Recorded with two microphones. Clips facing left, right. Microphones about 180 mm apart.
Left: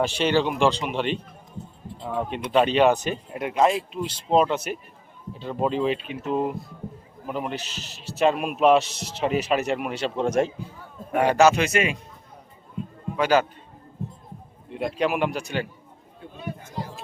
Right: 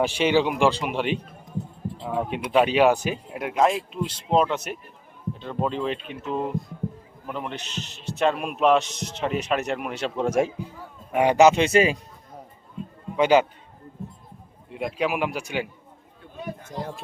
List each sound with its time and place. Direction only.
0.0 s speech: 10° right (ahead or behind); by 11.9 s 30° right (ahead or behind)
13.1 s speech: 20° right (ahead or behind)
14.7 s speech: 5° right (ahead or behind)